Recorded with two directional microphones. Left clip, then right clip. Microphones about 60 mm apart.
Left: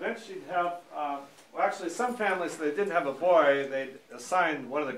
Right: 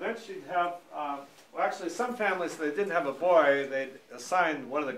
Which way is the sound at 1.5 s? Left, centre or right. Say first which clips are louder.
Left 2 dB; centre.